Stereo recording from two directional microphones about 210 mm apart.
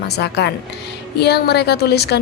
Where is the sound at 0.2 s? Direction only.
50° left (ahead or behind).